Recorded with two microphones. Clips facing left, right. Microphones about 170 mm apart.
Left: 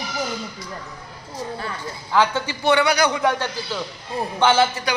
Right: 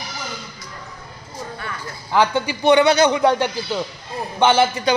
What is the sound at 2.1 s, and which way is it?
A man's voice, 15° right (ahead or behind).